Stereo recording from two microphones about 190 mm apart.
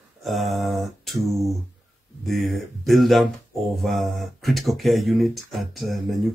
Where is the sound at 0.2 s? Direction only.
Centre (ahead or behind).